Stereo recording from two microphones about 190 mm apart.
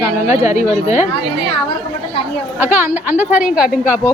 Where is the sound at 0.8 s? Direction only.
40° left (ahead or behind).